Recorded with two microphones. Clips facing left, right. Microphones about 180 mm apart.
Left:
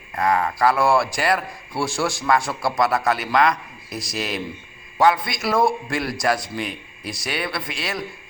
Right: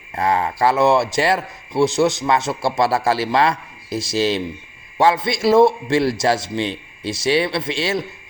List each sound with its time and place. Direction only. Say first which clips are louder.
0.2 s a man's voice: right 1 dB; 25° right (ahead or behind)